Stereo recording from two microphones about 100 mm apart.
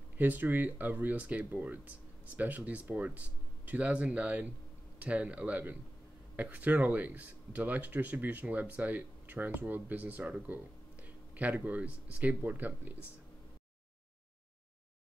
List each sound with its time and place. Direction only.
0.2 s speech: 20° right (ahead or behind)